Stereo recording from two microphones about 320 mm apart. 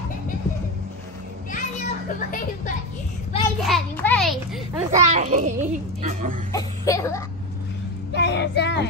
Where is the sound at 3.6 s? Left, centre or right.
Centre.